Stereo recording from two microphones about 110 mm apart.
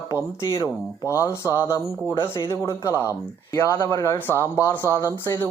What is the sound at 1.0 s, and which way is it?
Speech, 25° left (ahead or behind).